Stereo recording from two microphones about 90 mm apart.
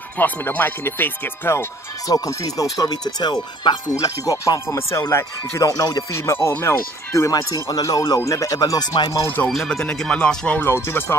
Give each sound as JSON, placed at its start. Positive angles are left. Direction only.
{"t": 0.2, "sound": "speech", "side_deg": 20}
{"t": 2.0, "sound": "speech", "side_deg": 40}
{"t": 3.9, "sound": "speech", "side_deg": 40}
{"t": 9.5, "sound": "speech", "side_deg": 5}
{"t": 10.7, "sound": "speech", "side_deg": 25}